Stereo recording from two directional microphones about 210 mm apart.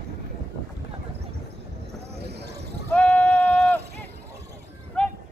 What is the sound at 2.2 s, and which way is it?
Basketball bounce, 50° right (ahead or behind).